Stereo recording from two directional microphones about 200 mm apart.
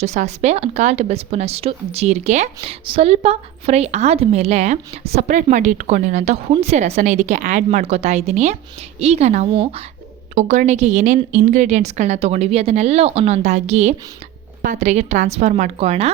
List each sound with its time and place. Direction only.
0.0 s speech: 35° right (ahead or behind)